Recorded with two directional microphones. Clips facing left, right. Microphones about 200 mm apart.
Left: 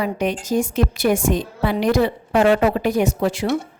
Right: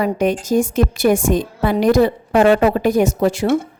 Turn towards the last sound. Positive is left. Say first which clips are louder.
# right 4 dB
turn(degrees=-45)  # may be behind; listen again after turning